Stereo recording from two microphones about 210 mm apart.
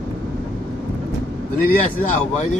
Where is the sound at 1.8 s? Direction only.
35° left (ahead or behind).